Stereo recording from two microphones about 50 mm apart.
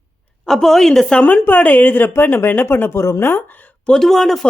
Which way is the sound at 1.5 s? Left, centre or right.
Left.